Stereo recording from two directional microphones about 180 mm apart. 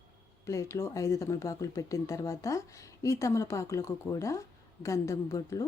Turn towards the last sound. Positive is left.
turn(degrees=15)  # may be behind; listen again after turning